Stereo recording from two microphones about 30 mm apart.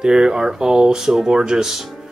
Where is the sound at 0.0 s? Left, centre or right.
Right.